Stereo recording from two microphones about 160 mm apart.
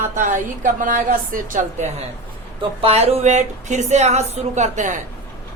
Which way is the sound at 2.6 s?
35° right (ahead or behind).